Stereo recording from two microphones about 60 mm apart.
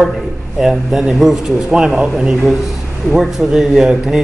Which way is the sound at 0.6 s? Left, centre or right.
Centre.